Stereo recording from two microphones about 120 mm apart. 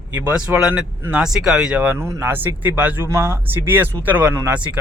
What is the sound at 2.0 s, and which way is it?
Speech, 25° right (ahead or behind).